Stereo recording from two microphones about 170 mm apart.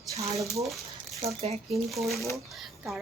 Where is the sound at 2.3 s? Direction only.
Centre (ahead or behind).